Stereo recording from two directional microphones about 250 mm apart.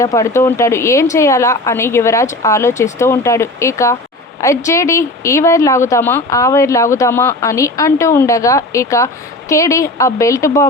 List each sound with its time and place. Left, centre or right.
0.0 s speech: centre